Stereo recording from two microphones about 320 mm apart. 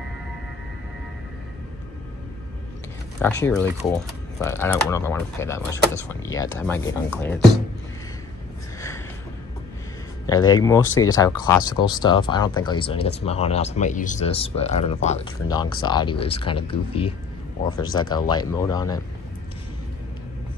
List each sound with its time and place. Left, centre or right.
3.4 s speech: centre
10.2 s speech: centre